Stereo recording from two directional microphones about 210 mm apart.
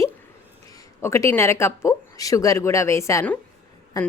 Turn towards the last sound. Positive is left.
turn(degrees=20)  # may be behind; listen again after turning